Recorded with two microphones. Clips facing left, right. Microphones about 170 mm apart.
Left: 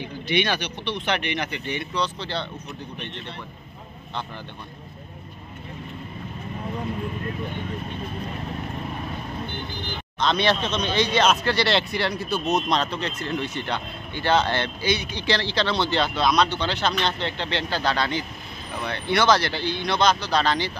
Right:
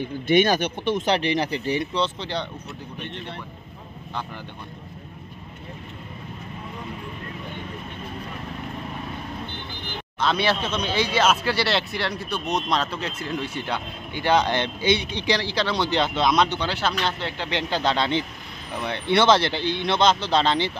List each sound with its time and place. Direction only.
0.0 s speech: 45° right (ahead or behind)
1.1 s speech: 35° right (ahead or behind)
10.2 s speech: 5° right (ahead or behind); by 15.2 s 25° right (ahead or behind)
15.2 s speech: 10° right (ahead or behind)
16.6 s speech: 5° right (ahead or behind); by 20.7 s 25° right (ahead or behind)